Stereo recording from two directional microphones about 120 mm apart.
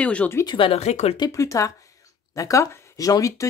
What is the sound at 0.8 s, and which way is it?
Speech, 65° left (ahead or behind).